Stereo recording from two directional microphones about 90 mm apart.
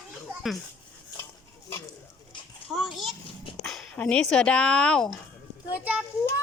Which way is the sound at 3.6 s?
5° left (ahead or behind).